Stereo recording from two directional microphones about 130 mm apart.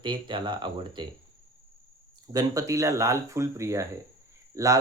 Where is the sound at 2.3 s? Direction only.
25° right (ahead or behind).